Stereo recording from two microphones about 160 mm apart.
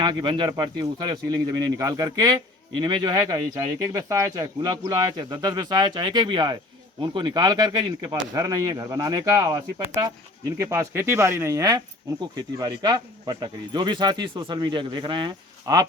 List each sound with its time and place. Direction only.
0.0 s speech: 30° right (ahead or behind)